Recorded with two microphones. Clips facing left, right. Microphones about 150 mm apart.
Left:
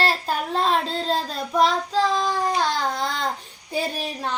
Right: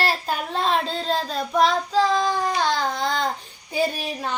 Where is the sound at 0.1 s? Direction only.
Centre (ahead or behind).